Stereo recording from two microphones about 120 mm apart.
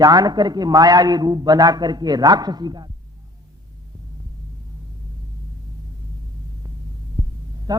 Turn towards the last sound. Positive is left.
turn(degrees=-30)  # may be behind; listen again after turning